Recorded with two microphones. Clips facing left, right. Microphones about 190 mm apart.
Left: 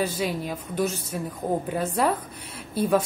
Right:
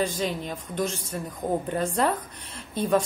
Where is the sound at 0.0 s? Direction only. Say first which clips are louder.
Left 1 dB; 10° left (ahead or behind).